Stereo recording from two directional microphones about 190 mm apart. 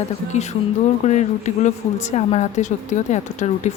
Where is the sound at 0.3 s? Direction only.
40° left (ahead or behind).